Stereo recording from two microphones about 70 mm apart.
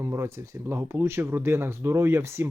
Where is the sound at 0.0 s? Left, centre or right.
Right.